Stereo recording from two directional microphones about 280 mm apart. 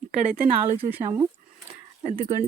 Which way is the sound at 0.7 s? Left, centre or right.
Centre.